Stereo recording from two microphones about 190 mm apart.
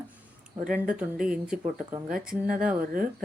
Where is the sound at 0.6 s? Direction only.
45° right (ahead or behind).